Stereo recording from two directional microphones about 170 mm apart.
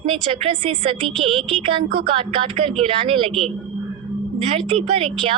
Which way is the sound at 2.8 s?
35° right (ahead or behind).